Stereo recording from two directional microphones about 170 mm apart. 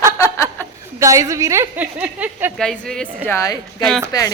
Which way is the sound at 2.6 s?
5° left (ahead or behind).